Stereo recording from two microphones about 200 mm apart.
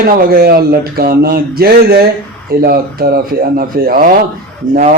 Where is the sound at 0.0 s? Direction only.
50° right (ahead or behind).